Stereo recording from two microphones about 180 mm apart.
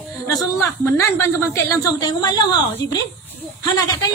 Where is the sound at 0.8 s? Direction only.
15° left (ahead or behind).